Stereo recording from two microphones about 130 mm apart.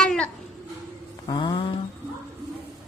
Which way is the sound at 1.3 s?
35° left (ahead or behind).